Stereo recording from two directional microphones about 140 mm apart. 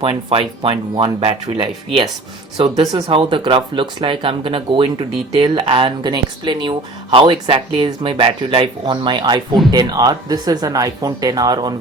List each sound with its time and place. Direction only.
0.0 s speech: 40° right (ahead or behind)